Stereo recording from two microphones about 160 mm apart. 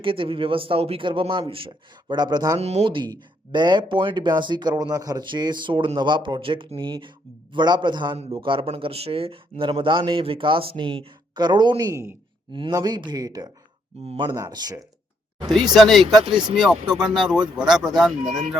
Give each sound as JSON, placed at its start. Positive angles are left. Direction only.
{"t": 0.0, "sound": "speech", "side_deg": -35}
{"t": 2.6, "sound": "speech", "side_deg": -40}
{"t": 15.7, "sound": "speech", "side_deg": 0}
{"t": 16.2, "sound": "speech", "side_deg": -30}
{"t": 16.6, "sound": "speech", "side_deg": -5}